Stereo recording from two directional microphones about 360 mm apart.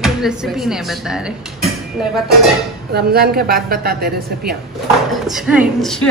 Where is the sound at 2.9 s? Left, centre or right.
Right.